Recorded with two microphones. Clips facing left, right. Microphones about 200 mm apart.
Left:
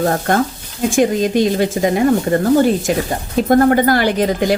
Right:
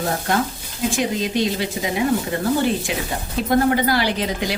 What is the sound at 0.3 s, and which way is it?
A woman's voice, 50° left (ahead or behind).